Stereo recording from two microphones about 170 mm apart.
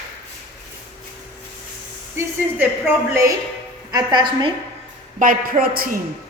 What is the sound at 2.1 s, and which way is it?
A woman's voice, 15° right (ahead or behind).